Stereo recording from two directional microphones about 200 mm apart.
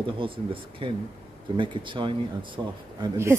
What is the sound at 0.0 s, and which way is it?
Speech, 25° right (ahead or behind).